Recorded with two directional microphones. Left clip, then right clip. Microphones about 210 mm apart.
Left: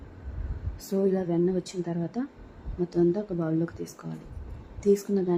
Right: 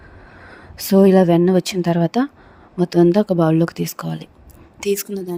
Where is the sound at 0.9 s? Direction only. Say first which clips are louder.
Right 14 dB; 50° right (ahead or behind).